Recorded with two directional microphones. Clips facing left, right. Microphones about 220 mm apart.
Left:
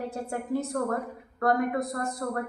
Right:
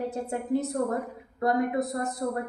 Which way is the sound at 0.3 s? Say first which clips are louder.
Right 2 dB; 20° right (ahead or behind).